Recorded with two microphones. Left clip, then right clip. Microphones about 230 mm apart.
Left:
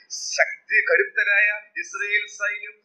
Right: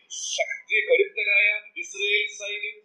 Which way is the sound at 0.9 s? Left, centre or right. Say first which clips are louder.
Right 1 dB; centre.